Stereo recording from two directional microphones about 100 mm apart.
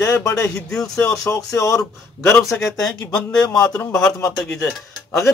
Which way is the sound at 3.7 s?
25° left (ahead or behind).